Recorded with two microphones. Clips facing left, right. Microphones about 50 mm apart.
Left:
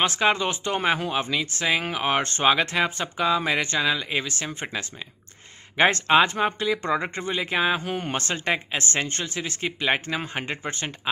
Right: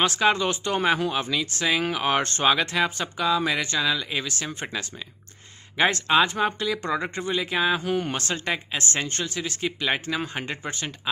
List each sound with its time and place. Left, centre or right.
0.0 s speech: left
5.8 s speech: left
8.5 s speech: left
10.7 s speech: left